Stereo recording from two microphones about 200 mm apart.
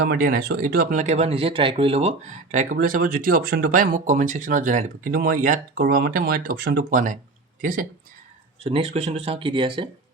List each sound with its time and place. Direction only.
0.0 s speech: 45° right (ahead or behind)
8.6 s speech: 30° right (ahead or behind)